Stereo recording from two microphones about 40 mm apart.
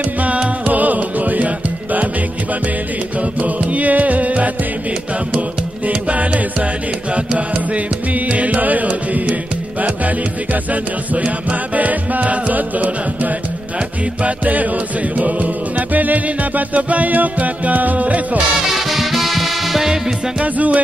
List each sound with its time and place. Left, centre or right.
0.7 s music: right
3.2 s music: right
5.9 s music: right
18.7 s music: centre
20.4 s music: right